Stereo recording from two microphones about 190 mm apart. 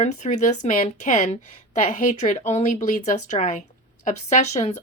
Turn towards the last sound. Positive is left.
turn(degrees=35)  # may be behind; listen again after turning